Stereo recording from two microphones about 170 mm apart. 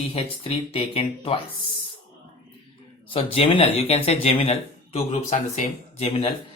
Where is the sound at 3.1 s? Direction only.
35° left (ahead or behind).